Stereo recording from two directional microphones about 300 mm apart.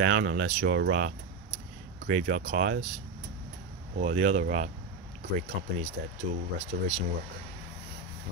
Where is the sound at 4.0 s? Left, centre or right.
Right.